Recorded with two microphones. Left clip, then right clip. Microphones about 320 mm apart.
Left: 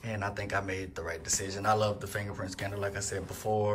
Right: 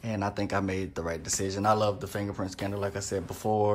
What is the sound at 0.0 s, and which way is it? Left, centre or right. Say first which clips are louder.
Speech: right 4 dB; centre.